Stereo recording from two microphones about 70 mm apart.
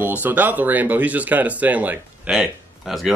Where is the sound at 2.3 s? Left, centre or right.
Centre.